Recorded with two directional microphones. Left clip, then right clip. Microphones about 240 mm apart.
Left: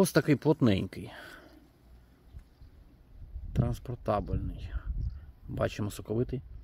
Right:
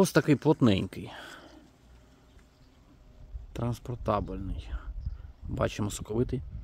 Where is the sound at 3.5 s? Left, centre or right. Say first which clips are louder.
Even; centre.